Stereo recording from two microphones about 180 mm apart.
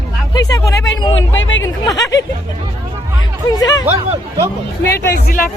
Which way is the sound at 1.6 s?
20° left (ahead or behind).